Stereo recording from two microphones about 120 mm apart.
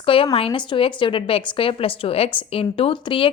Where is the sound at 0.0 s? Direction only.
50° left (ahead or behind).